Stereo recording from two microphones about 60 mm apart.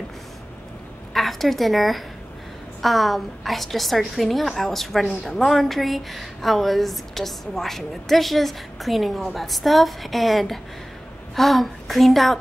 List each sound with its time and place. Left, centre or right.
1.1 s a woman's voice: centre